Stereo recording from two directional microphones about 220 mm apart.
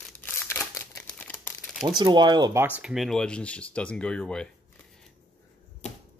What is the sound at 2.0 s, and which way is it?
Speech, 20° right (ahead or behind).